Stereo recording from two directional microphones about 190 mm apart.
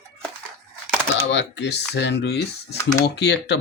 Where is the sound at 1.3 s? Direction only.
65° left (ahead or behind).